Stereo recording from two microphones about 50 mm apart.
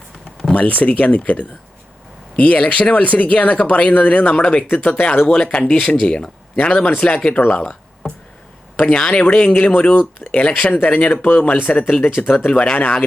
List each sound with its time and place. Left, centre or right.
0.5 s speech: left
7.6 s a sound: centre
8.9 s speech: centre
9.3 s speech: left
10.4 s speech: left
12.7 s speech: left